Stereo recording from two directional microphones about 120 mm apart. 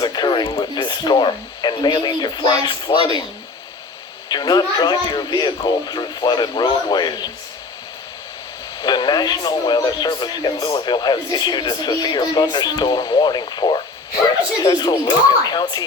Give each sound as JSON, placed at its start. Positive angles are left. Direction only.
{"t": 0.0, "sound": "speech", "side_deg": 35}
{"t": 4.3, "sound": "speech", "side_deg": 35}
{"t": 8.8, "sound": "speech", "side_deg": 40}